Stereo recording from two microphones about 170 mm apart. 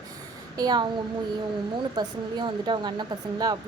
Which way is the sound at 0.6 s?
25° right (ahead or behind).